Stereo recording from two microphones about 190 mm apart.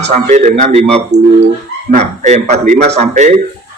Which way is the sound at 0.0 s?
40° right (ahead or behind).